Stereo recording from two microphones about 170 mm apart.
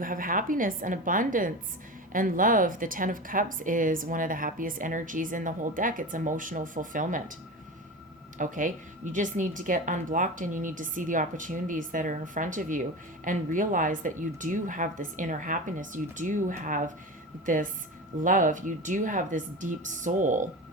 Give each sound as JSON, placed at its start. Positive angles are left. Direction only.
{"t": 0.0, "sound": "speech", "side_deg": -55}
{"t": 8.4, "sound": "speech", "side_deg": -50}